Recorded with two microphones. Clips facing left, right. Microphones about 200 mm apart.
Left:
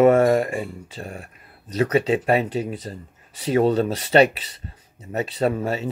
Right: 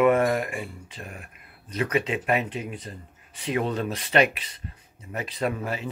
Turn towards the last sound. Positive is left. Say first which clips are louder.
# left 6 dB
turn(degrees=30)  # may be behind; listen again after turning